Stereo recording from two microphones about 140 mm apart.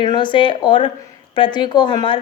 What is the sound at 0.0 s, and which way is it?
A woman's voice, 35° left (ahead or behind).